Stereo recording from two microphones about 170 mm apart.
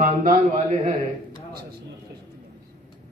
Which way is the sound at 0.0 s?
50° right (ahead or behind).